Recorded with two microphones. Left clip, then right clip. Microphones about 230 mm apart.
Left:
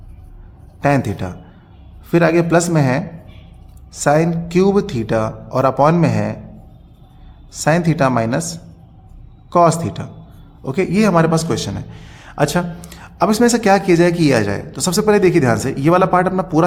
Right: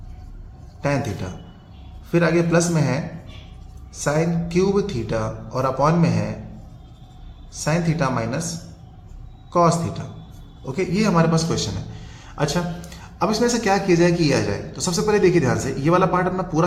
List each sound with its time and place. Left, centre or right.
0.8 s a man's voice: left
7.5 s speech: left
9.5 s a man's voice: left